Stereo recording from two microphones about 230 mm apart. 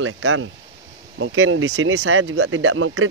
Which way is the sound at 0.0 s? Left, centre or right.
Right.